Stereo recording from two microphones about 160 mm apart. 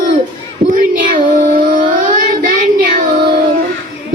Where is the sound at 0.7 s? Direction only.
60° right (ahead or behind).